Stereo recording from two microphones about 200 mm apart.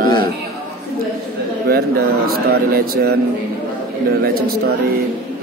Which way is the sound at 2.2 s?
50° right (ahead or behind).